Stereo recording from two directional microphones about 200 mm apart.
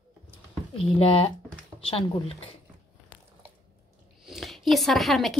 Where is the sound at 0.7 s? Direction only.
30° left (ahead or behind).